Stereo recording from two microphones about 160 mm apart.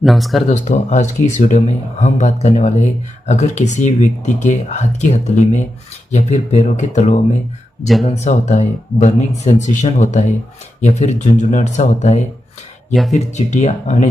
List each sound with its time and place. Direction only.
0.0 s speech: centre (ahead or behind)
0.5 s speech: 45° left (ahead or behind)